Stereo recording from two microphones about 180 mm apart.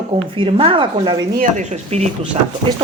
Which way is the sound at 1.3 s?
45° right (ahead or behind).